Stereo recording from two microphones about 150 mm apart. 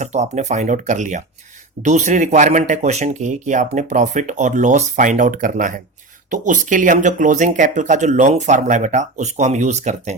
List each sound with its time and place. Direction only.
0.0 s speech: 50° right (ahead or behind)